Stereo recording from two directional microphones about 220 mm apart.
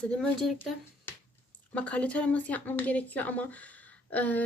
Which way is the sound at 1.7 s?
5° left (ahead or behind).